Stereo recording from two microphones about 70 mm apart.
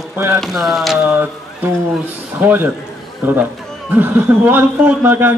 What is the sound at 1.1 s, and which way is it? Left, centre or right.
Speech, right.